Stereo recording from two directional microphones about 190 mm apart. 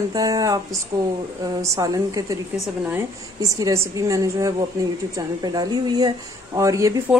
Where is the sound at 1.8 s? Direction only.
20° right (ahead or behind).